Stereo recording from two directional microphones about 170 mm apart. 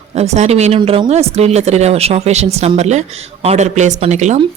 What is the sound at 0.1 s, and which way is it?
A woman's voice, 40° right (ahead or behind).